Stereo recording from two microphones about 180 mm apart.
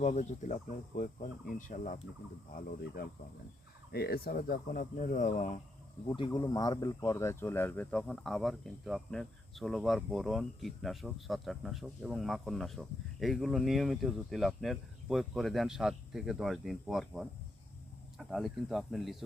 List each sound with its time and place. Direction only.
0.0 s speech: 40° left (ahead or behind)
3.9 s speech: 60° left (ahead or behind); by 5.5 s 45° left (ahead or behind)
6.1 s speech: 25° left (ahead or behind); by 19.1 s centre (ahead or behind)